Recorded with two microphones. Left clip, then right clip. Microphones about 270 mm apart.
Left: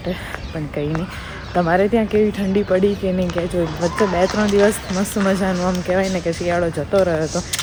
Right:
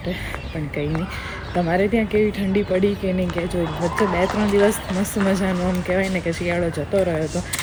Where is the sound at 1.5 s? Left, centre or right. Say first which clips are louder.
Left 4 dB; centre.